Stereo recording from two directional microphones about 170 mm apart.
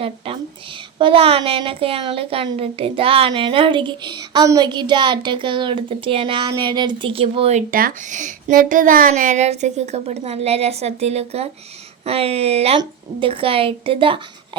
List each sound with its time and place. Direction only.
0.9 s a woman's voice: 30° right (ahead or behind)
7.7 s a woman's voice: 55° right (ahead or behind); by 14.6 s 30° right (ahead or behind)